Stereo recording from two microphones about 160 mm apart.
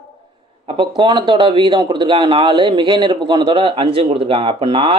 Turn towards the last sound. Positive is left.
turn(degrees=-30)  # may be behind; listen again after turning